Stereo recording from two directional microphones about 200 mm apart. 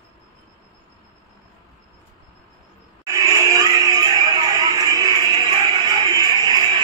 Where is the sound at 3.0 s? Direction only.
15° right (ahead or behind).